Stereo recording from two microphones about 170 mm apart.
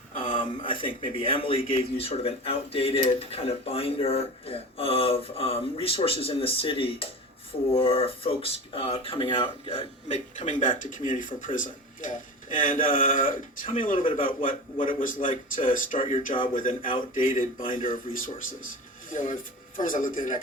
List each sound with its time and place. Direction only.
0.3 s a man's voice: 30° left (ahead or behind)
10.1 s speech: 45° left (ahead or behind)
19.1 s speech: 50° left (ahead or behind)